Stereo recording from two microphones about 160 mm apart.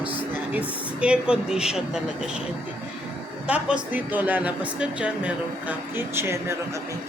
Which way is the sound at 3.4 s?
10° right (ahead or behind).